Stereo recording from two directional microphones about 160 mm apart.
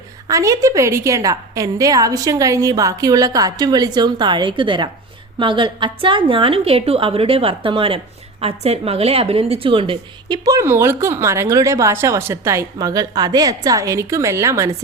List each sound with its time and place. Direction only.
0.3 s a woman's voice: 20° right (ahead or behind)